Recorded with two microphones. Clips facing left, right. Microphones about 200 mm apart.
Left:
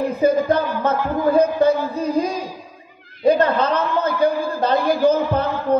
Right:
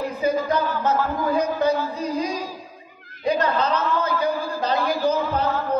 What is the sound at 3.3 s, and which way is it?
A man's voice, 55° left (ahead or behind).